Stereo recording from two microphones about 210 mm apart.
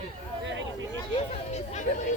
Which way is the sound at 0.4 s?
60° right (ahead or behind).